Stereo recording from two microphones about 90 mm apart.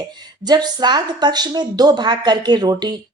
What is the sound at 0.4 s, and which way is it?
Speech, 50° right (ahead or behind).